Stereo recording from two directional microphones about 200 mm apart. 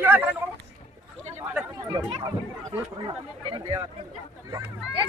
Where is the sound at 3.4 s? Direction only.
25° right (ahead or behind).